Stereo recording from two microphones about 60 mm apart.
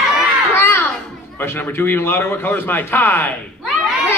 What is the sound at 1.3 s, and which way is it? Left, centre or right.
A man's voice, left.